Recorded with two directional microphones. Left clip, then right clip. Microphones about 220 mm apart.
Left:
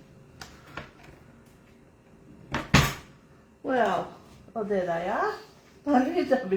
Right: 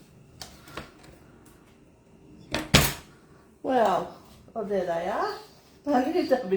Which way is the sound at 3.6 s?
35° right (ahead or behind).